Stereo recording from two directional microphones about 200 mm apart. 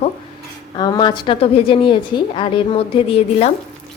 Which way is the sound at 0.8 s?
25° left (ahead or behind).